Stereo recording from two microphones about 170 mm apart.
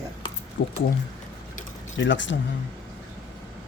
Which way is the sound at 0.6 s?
90° left.